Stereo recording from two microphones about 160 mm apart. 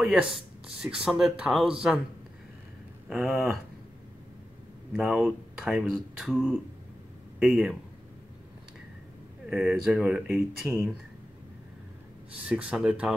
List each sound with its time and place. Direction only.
0.0 s speech: centre (ahead or behind)
3.1 s speech: 10° right (ahead or behind)
4.9 s speech: 5° right (ahead or behind)
9.5 s speech: centre (ahead or behind)
12.4 s speech: 5° right (ahead or behind)